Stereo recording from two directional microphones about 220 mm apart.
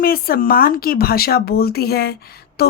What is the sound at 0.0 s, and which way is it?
Speech, 40° left (ahead or behind).